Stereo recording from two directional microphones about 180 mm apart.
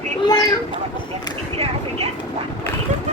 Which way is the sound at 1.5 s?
30° right (ahead or behind).